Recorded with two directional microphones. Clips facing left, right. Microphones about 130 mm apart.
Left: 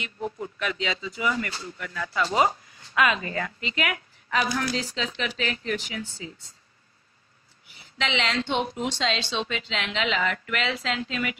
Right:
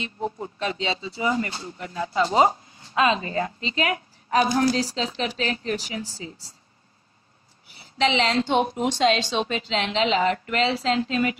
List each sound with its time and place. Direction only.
0.0 s speech: 30° right (ahead or behind)
7.7 s a woman's voice: 35° right (ahead or behind)